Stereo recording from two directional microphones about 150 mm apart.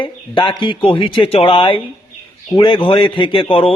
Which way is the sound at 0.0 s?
30° left (ahead or behind).